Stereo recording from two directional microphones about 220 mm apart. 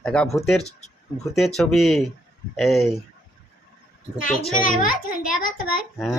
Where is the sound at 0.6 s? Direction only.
30° left (ahead or behind).